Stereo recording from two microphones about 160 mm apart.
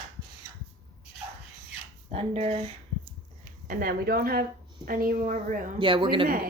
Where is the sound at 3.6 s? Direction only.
70° right (ahead or behind).